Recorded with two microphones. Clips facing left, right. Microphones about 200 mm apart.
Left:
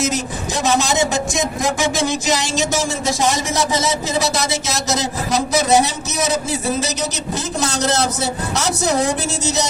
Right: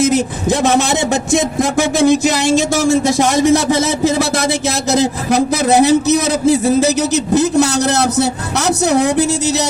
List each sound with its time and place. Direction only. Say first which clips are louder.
0.0 s a man's voice: right 8 dB; 60° right (ahead or behind)
3.7 s a man's voice: right 6 dB; 60° right (ahead or behind)
7.6 s a man's voice: right 5 dB; 65° right (ahead or behind)